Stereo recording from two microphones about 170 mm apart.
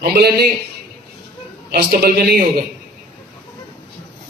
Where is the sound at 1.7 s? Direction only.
65° right (ahead or behind).